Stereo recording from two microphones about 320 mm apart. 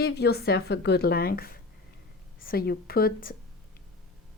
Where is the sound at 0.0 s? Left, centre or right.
Left.